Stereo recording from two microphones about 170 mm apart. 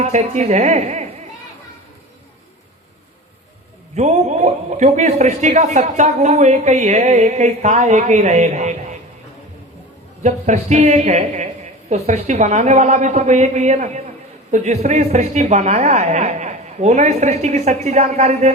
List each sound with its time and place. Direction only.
0.0 s a man's voice: 40° right (ahead or behind)
3.9 s a man's voice: 45° right (ahead or behind)
10.2 s a man's voice: 45° right (ahead or behind)